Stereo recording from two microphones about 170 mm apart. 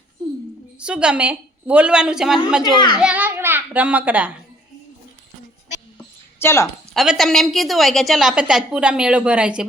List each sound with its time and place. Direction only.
0.9 s a woman's voice: 5° right (ahead or behind)
2.7 s a child's voice: 25° left (ahead or behind)
3.0 s a sound: 10° right (ahead or behind)
6.4 s a woman's voice: 15° left (ahead or behind)
6.9 s a woman's voice: centre (ahead or behind)